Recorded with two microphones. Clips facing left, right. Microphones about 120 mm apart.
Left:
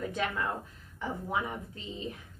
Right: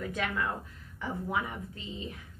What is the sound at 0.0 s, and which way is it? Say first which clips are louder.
A woman's voice: even; 30° left (ahead or behind).